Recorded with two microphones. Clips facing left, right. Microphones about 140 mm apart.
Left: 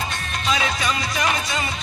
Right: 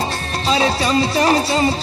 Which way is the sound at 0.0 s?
35° right (ahead or behind).